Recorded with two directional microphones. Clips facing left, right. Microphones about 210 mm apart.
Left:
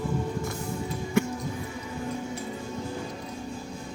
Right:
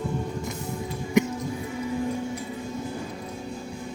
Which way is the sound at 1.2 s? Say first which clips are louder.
Right 4 dB; 20° right (ahead or behind).